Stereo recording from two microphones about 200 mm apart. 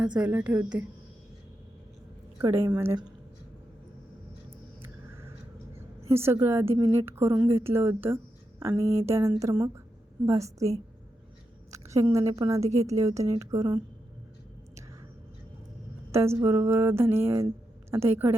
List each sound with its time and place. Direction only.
0.2 s a woman's voice: 10° right (ahead or behind)
2.4 s a woman's voice: 15° right (ahead or behind)
4.8 s a sound: 10° right (ahead or behind)
6.1 s a woman's voice: 10° right (ahead or behind)
11.7 s a woman's voice: 15° right (ahead or behind)
12.6 s a woman's voice: 35° right (ahead or behind)
13.0 s a woman's voice: 15° right (ahead or behind)
16.1 s a woman's voice: 15° right (ahead or behind)